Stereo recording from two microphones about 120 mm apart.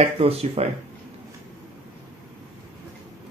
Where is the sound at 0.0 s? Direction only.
55° right (ahead or behind).